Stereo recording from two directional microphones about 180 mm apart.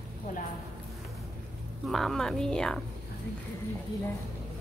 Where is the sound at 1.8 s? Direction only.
Centre (ahead or behind).